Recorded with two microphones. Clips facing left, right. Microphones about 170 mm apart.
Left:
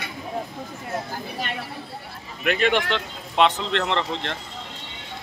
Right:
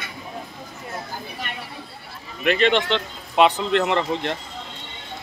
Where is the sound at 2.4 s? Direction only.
5° left (ahead or behind); by 4.4 s 10° right (ahead or behind).